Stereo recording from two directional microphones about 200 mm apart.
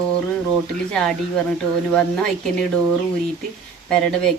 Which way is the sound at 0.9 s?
Centre (ahead or behind).